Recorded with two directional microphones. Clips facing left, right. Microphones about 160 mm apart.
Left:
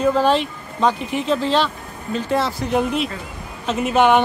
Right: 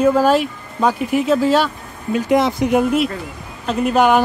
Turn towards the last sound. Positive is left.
turn(degrees=0)  # may be behind; listen again after turning